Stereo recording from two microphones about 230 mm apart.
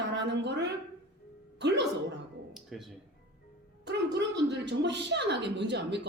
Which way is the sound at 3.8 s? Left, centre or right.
Right.